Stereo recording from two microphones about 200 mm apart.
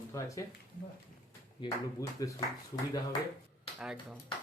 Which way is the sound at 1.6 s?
25° left (ahead or behind).